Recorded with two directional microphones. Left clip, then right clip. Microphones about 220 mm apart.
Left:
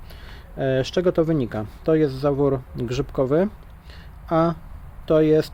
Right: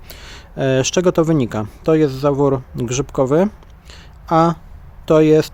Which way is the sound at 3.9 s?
20° right (ahead or behind).